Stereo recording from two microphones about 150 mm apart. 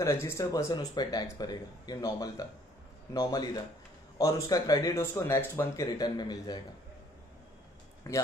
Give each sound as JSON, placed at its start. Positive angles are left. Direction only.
{"t": 0.0, "sound": "speech", "side_deg": 20}
{"t": 5.9, "sound": "speech", "side_deg": 25}
{"t": 8.1, "sound": "speech", "side_deg": 20}